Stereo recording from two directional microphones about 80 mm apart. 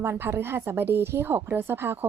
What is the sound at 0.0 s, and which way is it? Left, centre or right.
A woman's voice, right.